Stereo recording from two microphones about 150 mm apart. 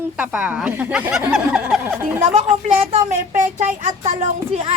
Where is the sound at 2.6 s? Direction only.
45° right (ahead or behind).